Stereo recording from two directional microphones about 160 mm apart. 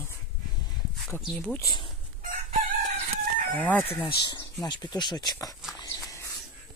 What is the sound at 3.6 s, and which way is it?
Speech, 10° left (ahead or behind).